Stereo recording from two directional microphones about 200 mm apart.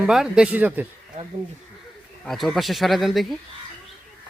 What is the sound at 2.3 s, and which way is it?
Speech, centre (ahead or behind).